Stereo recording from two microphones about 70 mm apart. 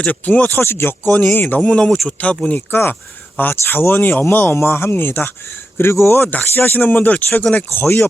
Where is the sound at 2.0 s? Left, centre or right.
Centre.